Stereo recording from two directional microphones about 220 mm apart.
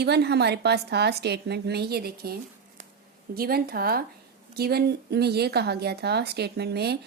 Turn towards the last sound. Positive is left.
turn(degrees=-50)  # may be behind; listen again after turning